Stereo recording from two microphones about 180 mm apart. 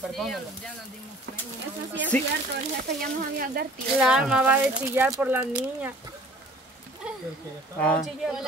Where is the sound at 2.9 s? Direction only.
55° right (ahead or behind).